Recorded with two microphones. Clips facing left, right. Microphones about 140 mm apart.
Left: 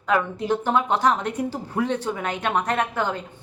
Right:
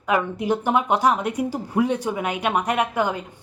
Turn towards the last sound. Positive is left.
turn(degrees=-10)  # may be behind; listen again after turning